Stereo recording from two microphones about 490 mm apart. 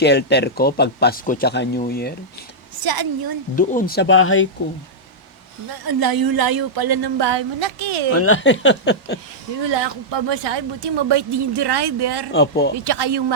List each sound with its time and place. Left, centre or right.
0.0 s speech: left
2.7 s a woman's voice: right
3.5 s speech: centre
5.8 s speech: right
8.1 s speech: left
9.6 s speech: right
12.3 s speech: left
12.7 s speech: right